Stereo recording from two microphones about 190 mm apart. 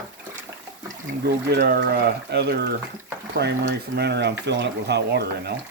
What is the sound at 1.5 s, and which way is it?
Speech, 55° right (ahead or behind).